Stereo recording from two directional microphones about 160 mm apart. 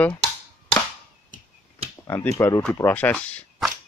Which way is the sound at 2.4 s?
20° left (ahead or behind).